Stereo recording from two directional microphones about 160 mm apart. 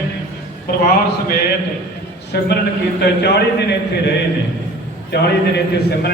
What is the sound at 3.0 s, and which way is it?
A man's voice, 90° left.